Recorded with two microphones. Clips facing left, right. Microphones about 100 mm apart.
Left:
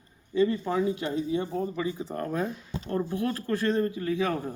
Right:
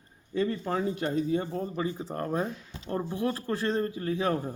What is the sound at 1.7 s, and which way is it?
Speech, 40° right (ahead or behind).